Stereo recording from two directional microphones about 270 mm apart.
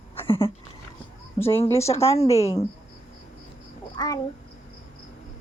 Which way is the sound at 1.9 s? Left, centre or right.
Left.